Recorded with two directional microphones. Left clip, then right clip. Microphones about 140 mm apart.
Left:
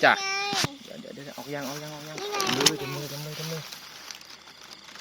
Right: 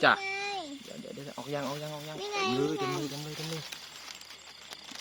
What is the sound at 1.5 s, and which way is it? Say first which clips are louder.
Speech: even; 20° right (ahead or behind).